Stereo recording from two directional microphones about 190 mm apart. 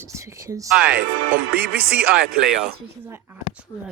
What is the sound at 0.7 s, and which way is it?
Speech, 5° right (ahead or behind).